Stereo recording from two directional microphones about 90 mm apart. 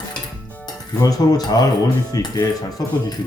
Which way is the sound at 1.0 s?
45° left (ahead or behind).